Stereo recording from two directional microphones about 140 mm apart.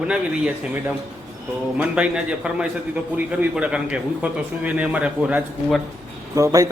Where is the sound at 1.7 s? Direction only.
10° right (ahead or behind).